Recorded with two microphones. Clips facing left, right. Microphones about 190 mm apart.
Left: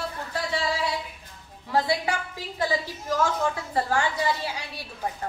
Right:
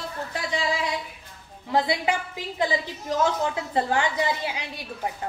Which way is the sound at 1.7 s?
20° right (ahead or behind).